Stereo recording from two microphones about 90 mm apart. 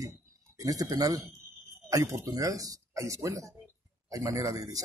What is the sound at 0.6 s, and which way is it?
Speech, 40° right (ahead or behind).